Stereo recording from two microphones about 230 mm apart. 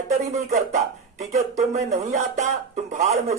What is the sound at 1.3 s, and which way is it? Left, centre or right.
Speech, right.